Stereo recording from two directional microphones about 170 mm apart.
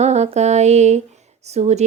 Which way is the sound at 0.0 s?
40° right (ahead or behind).